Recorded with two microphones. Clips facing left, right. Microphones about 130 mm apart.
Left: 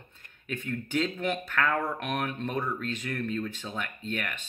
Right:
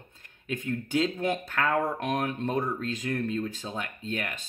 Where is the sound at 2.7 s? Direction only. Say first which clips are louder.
Right 3 dB; 35° right (ahead or behind).